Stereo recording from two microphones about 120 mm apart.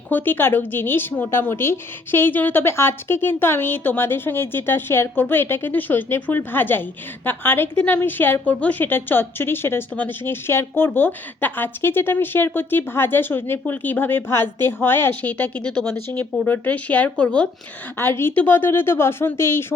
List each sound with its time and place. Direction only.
0.1 s a woman's voice: 15° left (ahead or behind)
17.9 s a woman's voice: 20° left (ahead or behind)